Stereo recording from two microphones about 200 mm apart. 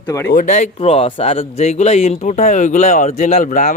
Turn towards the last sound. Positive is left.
turn(degrees=40)  # may be behind; listen again after turning